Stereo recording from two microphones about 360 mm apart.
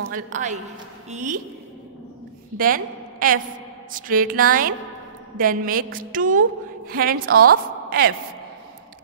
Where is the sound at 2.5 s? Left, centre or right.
Right.